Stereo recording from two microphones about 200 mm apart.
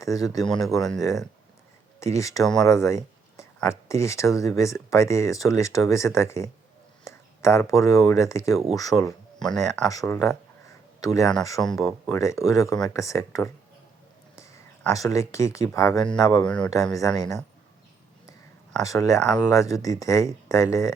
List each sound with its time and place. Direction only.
0.0 s speech: 15° left (ahead or behind)
0.4 s speech: centre (ahead or behind)
2.0 s speech: 15° left (ahead or behind)
9.4 s speech: 5° left (ahead or behind)
9.8 s speech: 15° left (ahead or behind)
11.7 s speech: centre (ahead or behind)
12.1 s speech: 15° left (ahead or behind)
14.9 s speech: 15° left (ahead or behind)
16.4 s speech: 5° left (ahead or behind)
16.9 s speech: 15° left (ahead or behind)
18.8 s speech: 15° left (ahead or behind)